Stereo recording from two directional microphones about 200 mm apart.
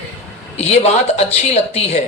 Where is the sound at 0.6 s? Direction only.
35° left (ahead or behind).